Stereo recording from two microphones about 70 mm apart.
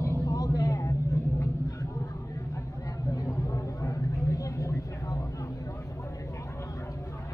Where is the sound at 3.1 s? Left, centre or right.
Left.